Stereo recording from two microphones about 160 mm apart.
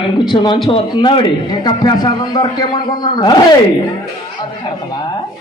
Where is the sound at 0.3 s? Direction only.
30° left (ahead or behind).